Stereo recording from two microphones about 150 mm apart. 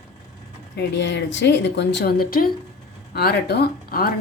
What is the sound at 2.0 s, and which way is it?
A woman's voice, 85° left.